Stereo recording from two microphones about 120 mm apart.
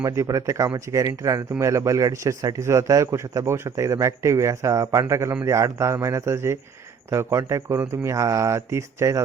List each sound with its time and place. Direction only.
0.0 s speech: 25° right (ahead or behind)